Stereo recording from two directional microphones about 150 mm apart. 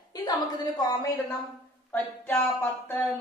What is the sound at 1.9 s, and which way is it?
A woman's voice, 10° left (ahead or behind).